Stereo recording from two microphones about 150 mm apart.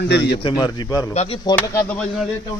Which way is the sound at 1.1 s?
45° left (ahead or behind).